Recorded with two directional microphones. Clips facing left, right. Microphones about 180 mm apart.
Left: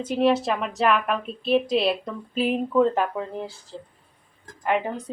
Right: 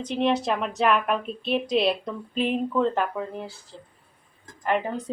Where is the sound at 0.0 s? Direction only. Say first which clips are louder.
Left 3 dB; 5° left (ahead or behind).